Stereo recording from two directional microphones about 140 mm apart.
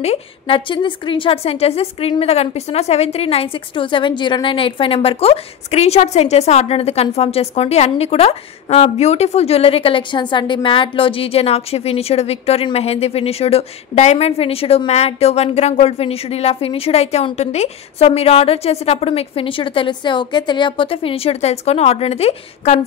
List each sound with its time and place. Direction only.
0.0 s a woman's voice: 45° left (ahead or behind)